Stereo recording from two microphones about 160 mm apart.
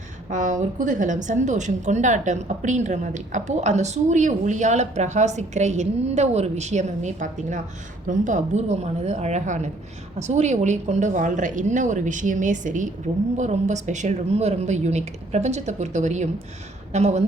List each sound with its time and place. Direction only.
0.3 s a woman's voice: 50° right (ahead or behind)